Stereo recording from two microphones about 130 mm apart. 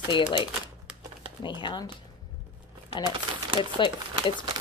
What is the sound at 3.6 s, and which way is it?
Speech, 40° left (ahead or behind).